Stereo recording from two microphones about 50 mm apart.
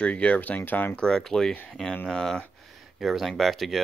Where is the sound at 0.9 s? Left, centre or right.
Centre.